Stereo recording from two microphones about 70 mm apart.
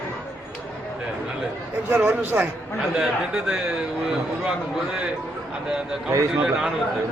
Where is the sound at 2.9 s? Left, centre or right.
Centre.